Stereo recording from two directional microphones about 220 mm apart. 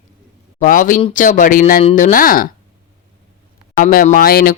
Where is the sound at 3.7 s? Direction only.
35° left (ahead or behind).